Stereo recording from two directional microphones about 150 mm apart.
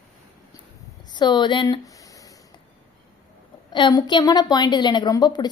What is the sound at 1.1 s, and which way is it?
Speech, 30° left (ahead or behind).